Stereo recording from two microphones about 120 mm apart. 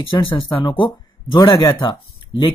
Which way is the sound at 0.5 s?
35° left (ahead or behind).